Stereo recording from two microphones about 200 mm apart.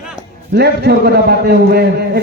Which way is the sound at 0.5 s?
55° right (ahead or behind).